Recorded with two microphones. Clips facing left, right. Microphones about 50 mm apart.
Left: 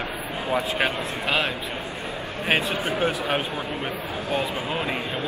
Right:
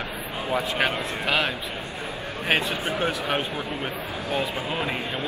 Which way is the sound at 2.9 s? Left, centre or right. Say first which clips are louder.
Left 2 dB; left.